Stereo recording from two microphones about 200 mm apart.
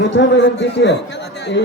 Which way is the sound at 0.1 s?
65° left (ahead or behind).